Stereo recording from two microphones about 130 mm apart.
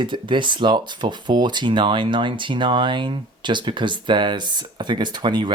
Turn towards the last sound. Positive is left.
turn(degrees=-35)  # may be behind; listen again after turning